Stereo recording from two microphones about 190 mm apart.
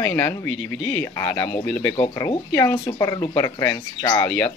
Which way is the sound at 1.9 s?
20° left (ahead or behind).